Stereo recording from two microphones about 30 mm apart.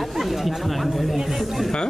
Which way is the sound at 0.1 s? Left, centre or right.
Centre.